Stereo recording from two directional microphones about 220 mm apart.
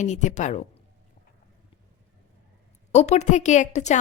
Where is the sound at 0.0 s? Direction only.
35° left (ahead or behind).